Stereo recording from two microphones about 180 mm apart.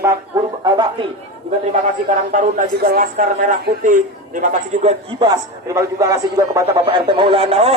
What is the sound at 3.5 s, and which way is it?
Speech, 45° right (ahead or behind).